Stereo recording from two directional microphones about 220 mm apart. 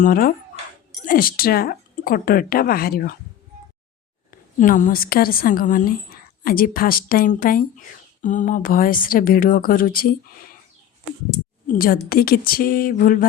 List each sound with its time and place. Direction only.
0.0 s a woman's voice: 40° left (ahead or behind)
4.3 s a woman's voice: 35° left (ahead or behind)
11.7 s a woman's voice: 40° left (ahead or behind)